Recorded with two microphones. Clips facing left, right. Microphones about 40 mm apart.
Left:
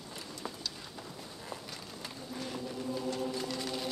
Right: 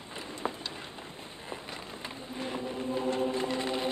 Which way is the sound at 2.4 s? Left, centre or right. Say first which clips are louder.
Right 5 dB; right.